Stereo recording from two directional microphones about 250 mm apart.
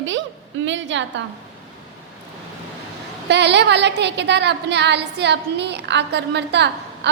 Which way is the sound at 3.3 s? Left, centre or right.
Right.